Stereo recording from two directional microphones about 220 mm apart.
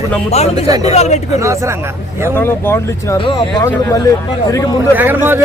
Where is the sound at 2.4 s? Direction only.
10° left (ahead or behind).